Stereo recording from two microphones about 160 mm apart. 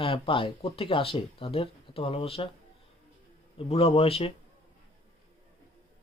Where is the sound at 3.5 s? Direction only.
40° left (ahead or behind).